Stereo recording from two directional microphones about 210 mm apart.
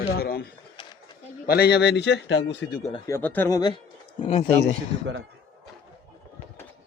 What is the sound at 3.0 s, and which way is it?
Speech, 10° left (ahead or behind).